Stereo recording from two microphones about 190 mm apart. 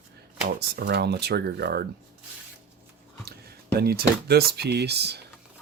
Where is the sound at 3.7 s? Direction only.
55° right (ahead or behind).